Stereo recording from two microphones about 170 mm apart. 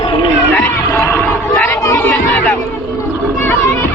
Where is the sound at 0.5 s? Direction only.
15° left (ahead or behind).